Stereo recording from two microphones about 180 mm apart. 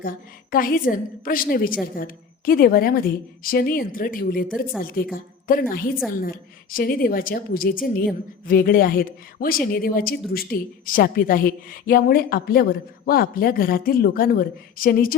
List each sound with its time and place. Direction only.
0.5 s a woman's voice: 50° left (ahead or behind)